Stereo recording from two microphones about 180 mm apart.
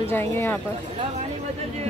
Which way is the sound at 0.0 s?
15° left (ahead or behind).